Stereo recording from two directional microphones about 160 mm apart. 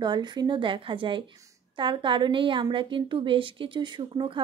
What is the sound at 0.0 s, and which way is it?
A woman's voice, 25° right (ahead or behind).